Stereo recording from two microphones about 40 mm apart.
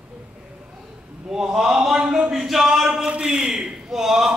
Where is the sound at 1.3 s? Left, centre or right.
Centre.